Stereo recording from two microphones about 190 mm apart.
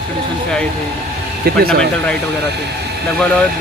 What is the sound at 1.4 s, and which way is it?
Speech, 55° right (ahead or behind).